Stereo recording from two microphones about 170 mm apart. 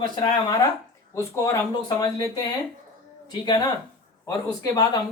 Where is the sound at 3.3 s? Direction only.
25° left (ahead or behind).